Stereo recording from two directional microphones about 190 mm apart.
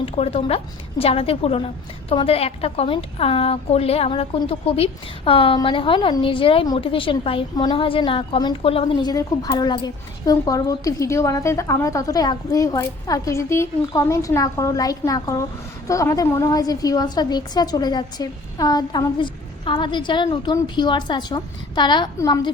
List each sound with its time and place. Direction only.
0.0 s a woman's voice: 30° left (ahead or behind)